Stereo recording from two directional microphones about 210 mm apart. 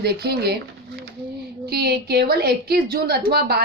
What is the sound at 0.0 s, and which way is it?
Speech, 50° right (ahead or behind).